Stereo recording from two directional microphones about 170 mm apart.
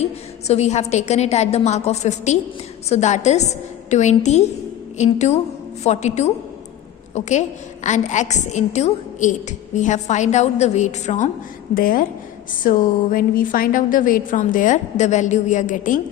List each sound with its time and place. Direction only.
0.0 s a woman's voice: 40° left (ahead or behind)
11.7 s a woman's voice: 55° left (ahead or behind)